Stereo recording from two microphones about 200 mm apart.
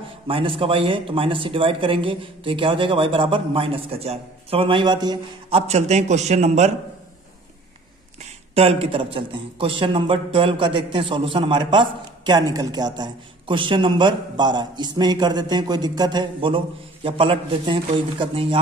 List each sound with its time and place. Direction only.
0.3 s a man's voice: 25° right (ahead or behind)
8.5 s a man's voice: 30° right (ahead or behind)